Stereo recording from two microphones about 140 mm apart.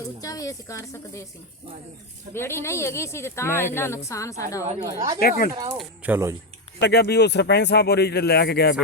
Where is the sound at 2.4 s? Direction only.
20° left (ahead or behind).